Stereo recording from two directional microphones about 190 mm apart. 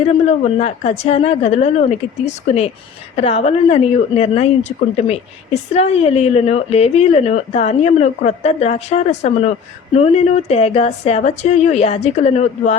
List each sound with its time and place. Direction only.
0.3 s a woman's voice: 35° left (ahead or behind)